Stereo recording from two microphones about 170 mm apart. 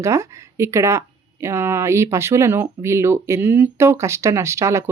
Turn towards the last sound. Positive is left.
turn(degrees=-15)  # may be behind; listen again after turning